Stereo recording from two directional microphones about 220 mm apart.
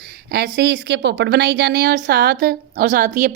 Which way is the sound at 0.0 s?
45° right (ahead or behind).